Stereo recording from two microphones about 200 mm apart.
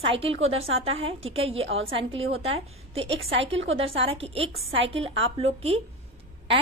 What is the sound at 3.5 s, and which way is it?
Speech, 70° right (ahead or behind).